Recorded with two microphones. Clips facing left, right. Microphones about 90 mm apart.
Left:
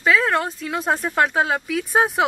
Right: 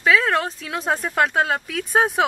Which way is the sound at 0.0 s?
Centre (ahead or behind).